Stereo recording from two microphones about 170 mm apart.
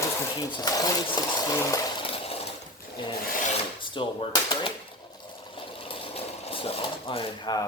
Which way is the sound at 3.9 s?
30° left (ahead or behind).